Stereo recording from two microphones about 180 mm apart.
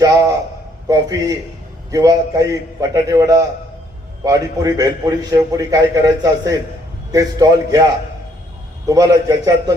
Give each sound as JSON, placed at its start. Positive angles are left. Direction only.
{"t": 0.9, "sound": "a man's voice", "side_deg": -20}
{"t": 8.9, "sound": "a man's voice", "side_deg": -20}